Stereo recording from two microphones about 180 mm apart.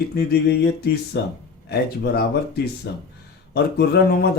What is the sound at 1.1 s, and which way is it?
A man's voice, 70° left (ahead or behind).